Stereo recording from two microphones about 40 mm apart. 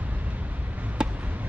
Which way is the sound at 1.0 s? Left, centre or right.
Right.